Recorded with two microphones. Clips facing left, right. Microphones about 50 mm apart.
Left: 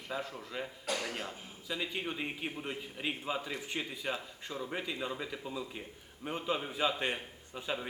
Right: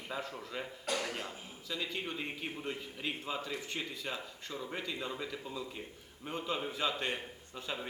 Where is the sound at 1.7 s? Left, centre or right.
Centre.